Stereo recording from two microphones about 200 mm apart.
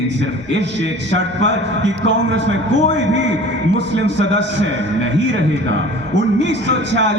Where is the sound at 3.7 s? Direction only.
60° right (ahead or behind).